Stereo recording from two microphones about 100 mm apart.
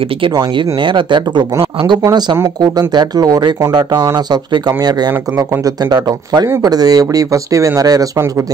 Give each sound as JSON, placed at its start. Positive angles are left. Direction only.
{"t": 0.4, "sound": "speech", "side_deg": -55}
{"t": 2.9, "sound": "speech", "side_deg": -45}